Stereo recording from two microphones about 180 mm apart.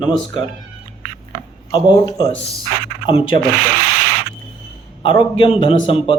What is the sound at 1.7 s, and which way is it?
Speech, 25° left (ahead or behind).